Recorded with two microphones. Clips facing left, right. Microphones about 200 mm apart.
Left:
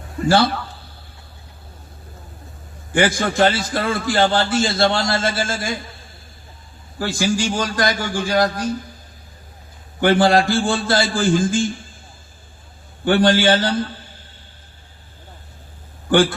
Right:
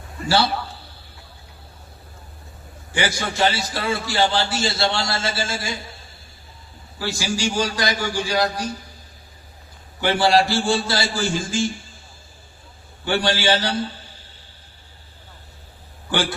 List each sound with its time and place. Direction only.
0.3 s a man's voice: 50° left (ahead or behind)
2.9 s a man's voice: 50° left (ahead or behind)
7.0 s a man's voice: 50° left (ahead or behind)
10.0 s a man's voice: 50° left (ahead or behind)
13.1 s a man's voice: 50° left (ahead or behind)
16.0 s speech: 50° left (ahead or behind)